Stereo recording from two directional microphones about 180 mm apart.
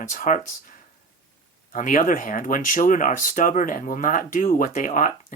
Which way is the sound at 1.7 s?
45° left (ahead or behind).